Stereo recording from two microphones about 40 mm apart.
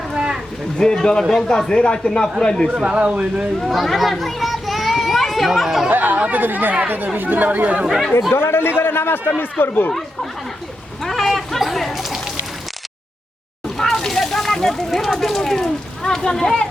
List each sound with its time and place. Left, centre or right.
0.8 s speech: centre
2.7 s speech: right
3.6 s a child's voice: centre
5.9 s speech: right
7.9 s speech: centre
8.3 s a man's voice: left
8.8 s a man's voice: left
9.4 s speech: left
11.0 s a sound: centre
13.7 s a sound: centre